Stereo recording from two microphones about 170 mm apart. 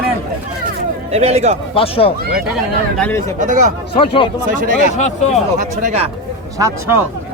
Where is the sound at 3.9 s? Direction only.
30° left (ahead or behind).